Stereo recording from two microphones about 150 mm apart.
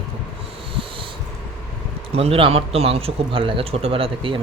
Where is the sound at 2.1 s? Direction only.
40° right (ahead or behind).